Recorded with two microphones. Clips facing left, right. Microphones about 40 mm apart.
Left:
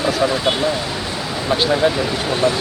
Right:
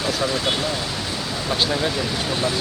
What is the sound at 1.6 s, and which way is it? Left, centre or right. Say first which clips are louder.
Speech: left 7 dB; centre.